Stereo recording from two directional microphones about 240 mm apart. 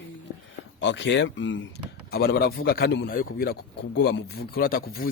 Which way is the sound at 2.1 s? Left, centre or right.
Left.